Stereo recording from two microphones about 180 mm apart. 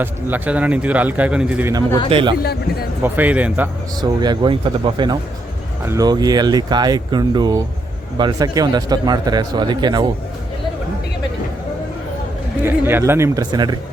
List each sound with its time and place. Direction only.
0.0 s a man's voice: 10° right (ahead or behind)
2.0 s a man's voice: 30° right (ahead or behind)
3.0 s a man's voice: 10° right (ahead or behind)
4.0 s a man's voice: 25° right (ahead or behind)
12.6 s a man's voice: 10° right (ahead or behind)